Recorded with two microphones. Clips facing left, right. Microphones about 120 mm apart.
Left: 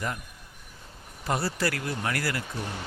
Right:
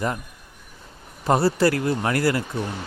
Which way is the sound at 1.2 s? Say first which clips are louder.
Right 9 dB; 45° right (ahead or behind).